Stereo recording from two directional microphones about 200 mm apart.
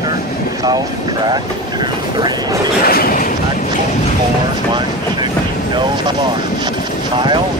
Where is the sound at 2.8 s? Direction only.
45° left (ahead or behind).